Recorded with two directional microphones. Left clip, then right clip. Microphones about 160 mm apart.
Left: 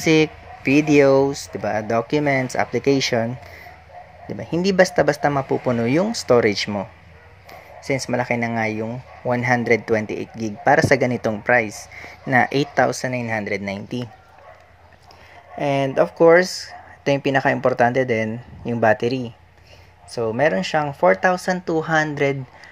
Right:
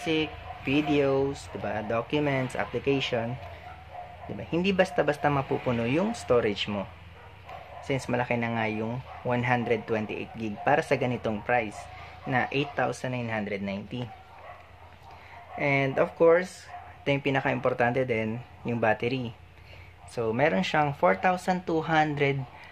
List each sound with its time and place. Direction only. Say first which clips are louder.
0.0 s speech: left 11 dB; 50° left (ahead or behind)
4.4 s speech: left 8 dB; 40° left (ahead or behind)
8.1 s speech: left 5 dB; 30° left (ahead or behind); by 14.0 s 45° left (ahead or behind)
15.6 s speech: left 6 dB; 35° left (ahead or behind)
16.3 s speech: left 11 dB; 40° left (ahead or behind)